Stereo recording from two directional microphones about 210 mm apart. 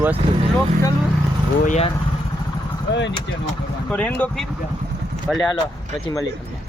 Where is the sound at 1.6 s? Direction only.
35° left (ahead or behind).